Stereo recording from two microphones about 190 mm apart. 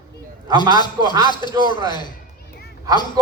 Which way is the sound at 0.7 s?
25° left (ahead or behind).